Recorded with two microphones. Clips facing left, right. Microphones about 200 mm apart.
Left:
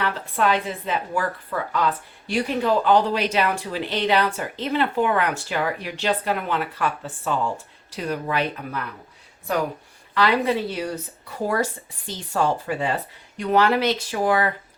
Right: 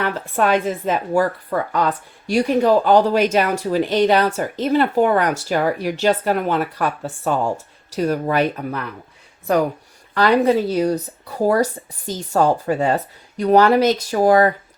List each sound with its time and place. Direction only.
0.0 s speech: 45° right (ahead or behind)
10.2 s speech: 45° right (ahead or behind)